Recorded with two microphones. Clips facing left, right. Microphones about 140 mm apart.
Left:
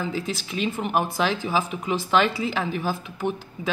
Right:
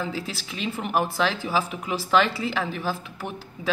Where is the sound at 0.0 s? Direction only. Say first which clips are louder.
Left 2 dB; centre (ahead or behind).